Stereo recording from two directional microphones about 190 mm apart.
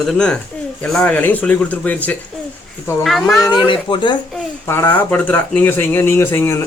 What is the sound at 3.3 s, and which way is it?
Speech, 20° left (ahead or behind).